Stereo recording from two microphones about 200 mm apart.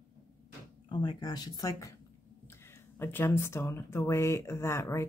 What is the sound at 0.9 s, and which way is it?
Speech, 20° left (ahead or behind).